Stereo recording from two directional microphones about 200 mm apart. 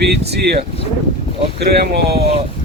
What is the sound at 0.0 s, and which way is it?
Speech, 55° right (ahead or behind).